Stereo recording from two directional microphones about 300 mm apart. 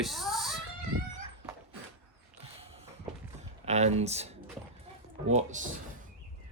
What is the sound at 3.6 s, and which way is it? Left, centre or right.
Speech, right.